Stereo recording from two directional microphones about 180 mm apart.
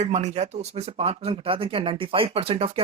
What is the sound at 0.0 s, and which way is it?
Speech, 40° right (ahead or behind).